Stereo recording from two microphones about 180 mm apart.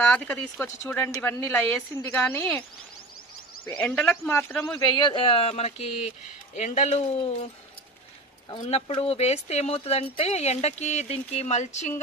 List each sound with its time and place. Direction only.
0.0 s speech: 5° left (ahead or behind)
3.8 s speech: 5° left (ahead or behind)
4.9 s speech: 25° left (ahead or behind)
8.5 s speech: 40° left (ahead or behind)